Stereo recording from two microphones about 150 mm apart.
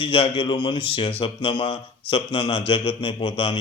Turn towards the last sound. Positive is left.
turn(degrees=35)  # may be behind; listen again after turning